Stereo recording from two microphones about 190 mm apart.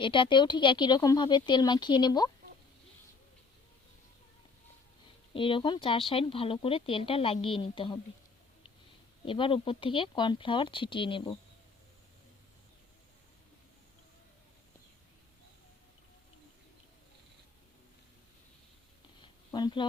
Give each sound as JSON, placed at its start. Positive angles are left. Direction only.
{"t": 0.0, "sound": "speech", "side_deg": 25}
{"t": 5.3, "sound": "speech", "side_deg": 25}
{"t": 9.2, "sound": "speech", "side_deg": 25}
{"t": 19.5, "sound": "speech", "side_deg": 25}